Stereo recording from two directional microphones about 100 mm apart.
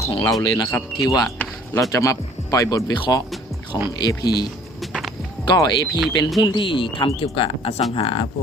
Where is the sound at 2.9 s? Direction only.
45° left (ahead or behind).